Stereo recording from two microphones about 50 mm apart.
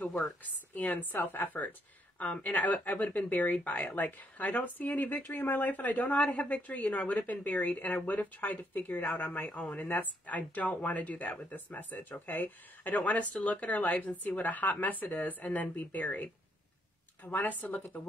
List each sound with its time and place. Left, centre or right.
0.7 s speech: left
1.1 s speech: left
3.5 s speech: left
3.9 s speech: left